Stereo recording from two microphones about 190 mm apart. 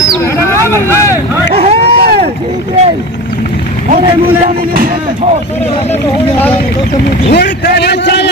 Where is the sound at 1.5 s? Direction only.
30° right (ahead or behind).